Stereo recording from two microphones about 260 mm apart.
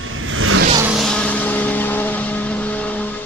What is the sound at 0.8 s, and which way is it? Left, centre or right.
Vehicle, centre.